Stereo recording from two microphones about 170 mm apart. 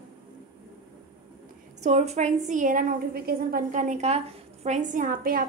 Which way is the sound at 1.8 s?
45° right (ahead or behind).